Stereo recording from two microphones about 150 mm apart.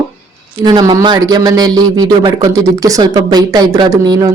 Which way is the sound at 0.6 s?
25° right (ahead or behind).